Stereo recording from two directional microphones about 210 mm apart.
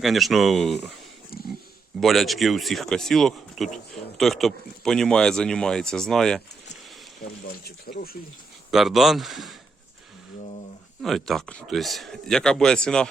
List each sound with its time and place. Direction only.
0.0 s speech: centre (ahead or behind)
2.0 s speech: centre (ahead or behind)
7.6 s speech: 45° left (ahead or behind)
8.7 s speech: centre (ahead or behind)
11.0 s speech: centre (ahead or behind)